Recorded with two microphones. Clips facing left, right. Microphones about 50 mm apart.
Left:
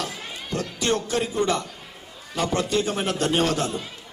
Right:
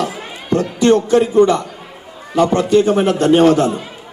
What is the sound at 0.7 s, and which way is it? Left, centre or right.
A man's voice, right.